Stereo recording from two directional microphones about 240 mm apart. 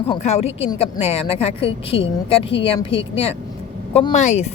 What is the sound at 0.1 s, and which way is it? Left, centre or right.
A woman's voice, left.